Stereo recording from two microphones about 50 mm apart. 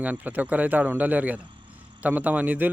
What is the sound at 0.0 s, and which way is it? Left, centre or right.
Speech, right.